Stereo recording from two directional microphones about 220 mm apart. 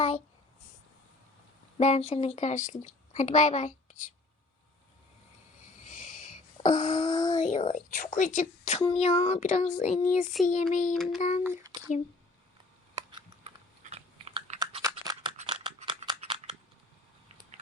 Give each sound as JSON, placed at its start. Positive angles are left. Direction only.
{"t": 1.8, "sound": "a woman's voice", "side_deg": 30}
{"t": 5.9, "sound": "a sound", "side_deg": 35}
{"t": 6.7, "sound": "a woman's voice", "side_deg": 35}
{"t": 7.1, "sound": "a sound", "side_deg": 15}
{"t": 7.3, "sound": "a woman's voice", "side_deg": 30}
{"t": 10.9, "sound": "child singing", "side_deg": 0}
{"t": 11.2, "sound": "a woman's voice", "side_deg": 30}
{"t": 11.4, "sound": "speech", "side_deg": -15}
{"t": 13.0, "sound": "typing", "side_deg": -20}
{"t": 13.8, "sound": "chewing", "side_deg": -30}
{"t": 14.6, "sound": "typing", "side_deg": -15}
{"t": 15.4, "sound": "scissors", "side_deg": -25}